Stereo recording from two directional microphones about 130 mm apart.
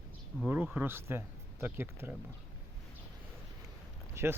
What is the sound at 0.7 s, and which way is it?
A man's voice, 15° right (ahead or behind).